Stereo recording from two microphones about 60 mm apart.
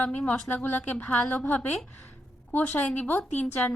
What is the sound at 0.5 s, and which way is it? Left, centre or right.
A woman's voice, left.